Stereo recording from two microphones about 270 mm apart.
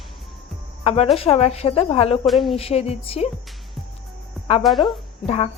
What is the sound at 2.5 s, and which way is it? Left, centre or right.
Speech, left.